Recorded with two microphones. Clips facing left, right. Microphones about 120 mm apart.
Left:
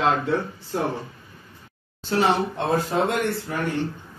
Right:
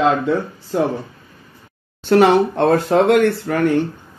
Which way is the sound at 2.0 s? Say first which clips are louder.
Right 9 dB; 65° right (ahead or behind).